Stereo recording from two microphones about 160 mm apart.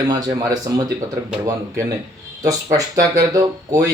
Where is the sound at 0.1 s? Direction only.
25° right (ahead or behind).